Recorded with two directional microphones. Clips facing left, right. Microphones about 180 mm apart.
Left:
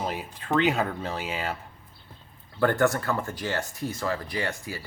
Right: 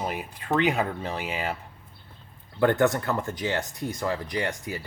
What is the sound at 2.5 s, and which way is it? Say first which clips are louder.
Speech: right 1 dB; 20° right (ahead or behind).